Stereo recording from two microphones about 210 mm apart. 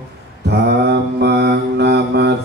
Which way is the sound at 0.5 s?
55° right (ahead or behind).